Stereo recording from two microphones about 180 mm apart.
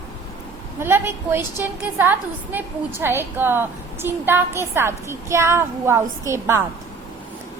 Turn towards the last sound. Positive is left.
turn(degrees=-15)  # may be behind; listen again after turning